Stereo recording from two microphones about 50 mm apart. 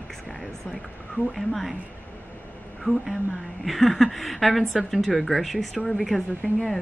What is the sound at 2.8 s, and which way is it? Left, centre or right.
A woman's voice, centre.